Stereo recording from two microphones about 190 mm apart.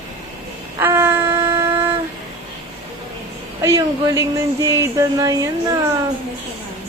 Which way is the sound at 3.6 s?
15° right (ahead or behind).